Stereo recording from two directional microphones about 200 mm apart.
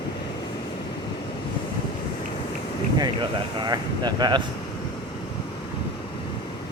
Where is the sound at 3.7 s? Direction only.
20° right (ahead or behind).